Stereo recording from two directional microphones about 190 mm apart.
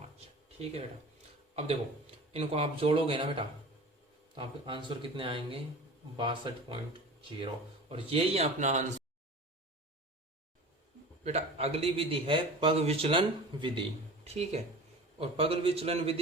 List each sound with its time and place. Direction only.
1.5 s a man's voice: 35° right (ahead or behind)
11.2 s a man's voice: 35° right (ahead or behind)